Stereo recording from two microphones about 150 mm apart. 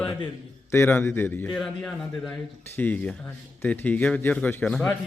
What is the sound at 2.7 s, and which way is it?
A man's voice, 10° left (ahead or behind).